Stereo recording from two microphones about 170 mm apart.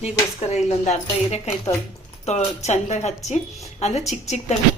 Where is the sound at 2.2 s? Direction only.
40° left (ahead or behind).